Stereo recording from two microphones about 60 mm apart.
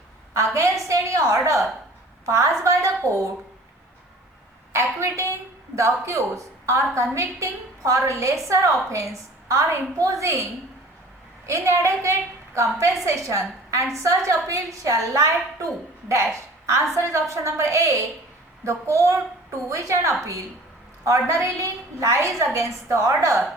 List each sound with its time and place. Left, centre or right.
0.3 s a woman's voice: right
0.9 s a sound: right
2.2 s a woman's voice: right
4.7 s a woman's voice: right